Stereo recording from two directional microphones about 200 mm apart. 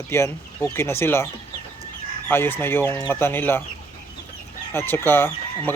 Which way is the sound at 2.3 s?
10° left (ahead or behind).